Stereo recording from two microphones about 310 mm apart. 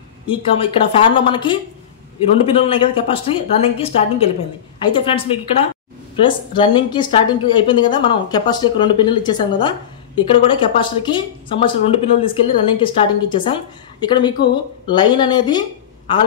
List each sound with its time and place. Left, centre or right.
0.3 s a woman's voice: centre